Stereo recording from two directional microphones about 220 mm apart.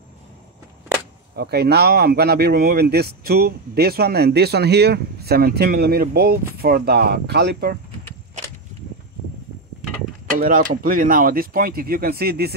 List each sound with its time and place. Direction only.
1.3 s speech: 45° right (ahead or behind)
10.4 s speech: 40° right (ahead or behind)